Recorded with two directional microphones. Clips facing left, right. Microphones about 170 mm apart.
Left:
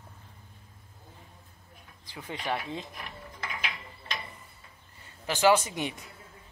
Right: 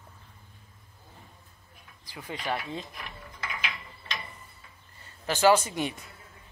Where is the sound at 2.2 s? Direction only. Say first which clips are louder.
Even; 20° left (ahead or behind).